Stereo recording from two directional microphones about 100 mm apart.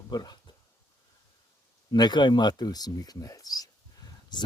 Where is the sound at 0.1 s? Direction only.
40° left (ahead or behind).